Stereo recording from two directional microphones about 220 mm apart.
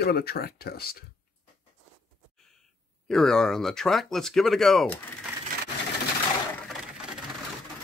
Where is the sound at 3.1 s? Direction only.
Centre (ahead or behind).